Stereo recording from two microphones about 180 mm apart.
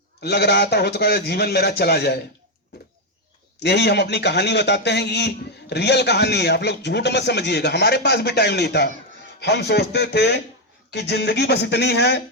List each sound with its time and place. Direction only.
0.2 s a man's voice: 65° left (ahead or behind)
2.7 s a sound: 65° left (ahead or behind)
3.6 s a man's voice: 70° left (ahead or behind)